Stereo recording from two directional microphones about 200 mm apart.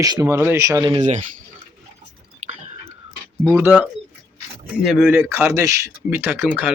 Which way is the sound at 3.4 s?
15° right (ahead or behind).